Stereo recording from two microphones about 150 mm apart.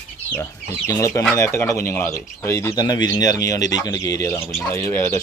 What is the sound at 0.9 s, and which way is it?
Speech, 20° left (ahead or behind).